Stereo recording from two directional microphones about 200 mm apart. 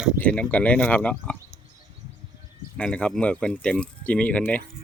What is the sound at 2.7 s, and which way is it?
Speech, 5° left (ahead or behind).